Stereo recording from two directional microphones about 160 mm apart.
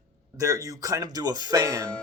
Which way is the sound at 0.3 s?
20° right (ahead or behind).